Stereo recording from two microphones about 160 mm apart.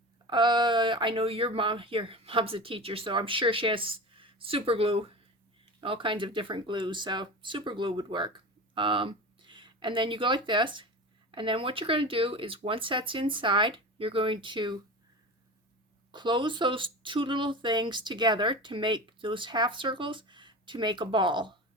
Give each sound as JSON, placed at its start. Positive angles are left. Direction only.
{"t": 0.3, "sound": "speech", "side_deg": -30}
{"t": 16.1, "sound": "speech", "side_deg": -30}